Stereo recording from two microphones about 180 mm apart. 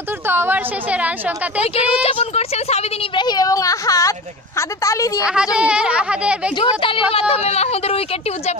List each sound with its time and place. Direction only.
0.3 s a woman's voice: 10° right (ahead or behind)
1.6 s a woman's voice: 35° left (ahead or behind)
3.3 s speech: 20° left (ahead or behind)
5.2 s speech: 5° right (ahead or behind)
6.6 s a woman's voice: 30° left (ahead or behind)